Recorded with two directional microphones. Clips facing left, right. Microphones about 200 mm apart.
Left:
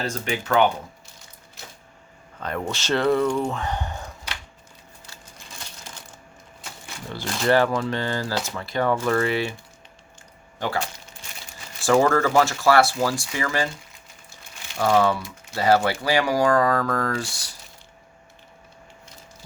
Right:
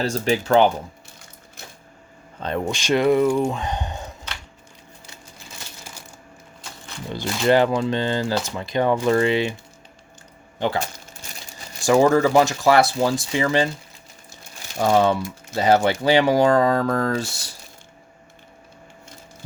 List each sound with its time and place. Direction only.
0.0 s speech: 30° right (ahead or behind)
2.4 s speech: 25° right (ahead or behind)
7.4 s speech: 20° right (ahead or behind)
10.6 s speech: 20° right (ahead or behind)
14.8 s speech: 20° right (ahead or behind)